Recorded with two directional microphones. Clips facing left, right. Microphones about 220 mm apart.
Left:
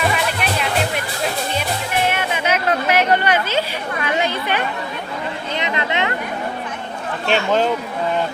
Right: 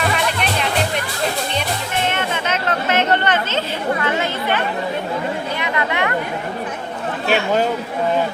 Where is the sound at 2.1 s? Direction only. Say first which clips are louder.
Left 1 dB; 10° left (ahead or behind).